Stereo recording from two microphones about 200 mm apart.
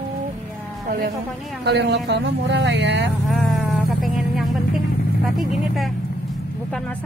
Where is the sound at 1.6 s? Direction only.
60° right (ahead or behind).